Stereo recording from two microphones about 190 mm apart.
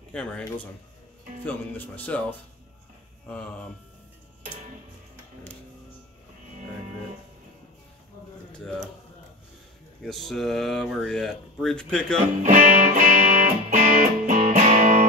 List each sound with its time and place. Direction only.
0.1 s a man's voice: 5° left (ahead or behind)
1.4 s speech: 10° left (ahead or behind)
3.3 s speech: 5° left (ahead or behind)
8.5 s a sound: 5° left (ahead or behind)
10.0 s speech: centre (ahead or behind)
12.4 s music: 40° right (ahead or behind)